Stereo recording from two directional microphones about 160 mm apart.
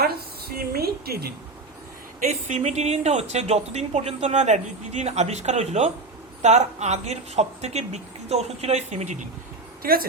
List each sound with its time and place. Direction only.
0.0 s a sound: 80° right
2.2 s speech: 45° right (ahead or behind)
9.8 s a woman's voice: 70° right (ahead or behind)